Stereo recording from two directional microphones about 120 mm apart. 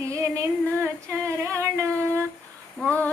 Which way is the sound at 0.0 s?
25° right (ahead or behind).